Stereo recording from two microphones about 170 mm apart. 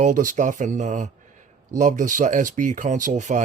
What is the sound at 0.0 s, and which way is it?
Speech, 50° right (ahead or behind).